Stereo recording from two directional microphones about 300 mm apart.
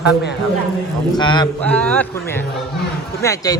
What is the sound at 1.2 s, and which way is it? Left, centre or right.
Speech, centre.